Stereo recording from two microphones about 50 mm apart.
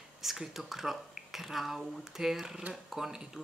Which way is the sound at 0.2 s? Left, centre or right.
Centre.